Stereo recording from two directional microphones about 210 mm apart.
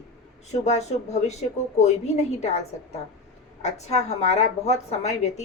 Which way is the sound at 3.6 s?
30° left (ahead or behind).